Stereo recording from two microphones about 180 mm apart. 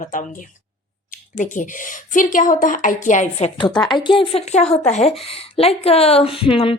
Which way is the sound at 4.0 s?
25° left (ahead or behind).